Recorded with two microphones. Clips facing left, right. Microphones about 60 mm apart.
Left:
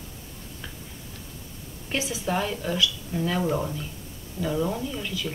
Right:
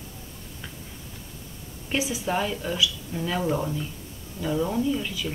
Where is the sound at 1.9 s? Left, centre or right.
Centre.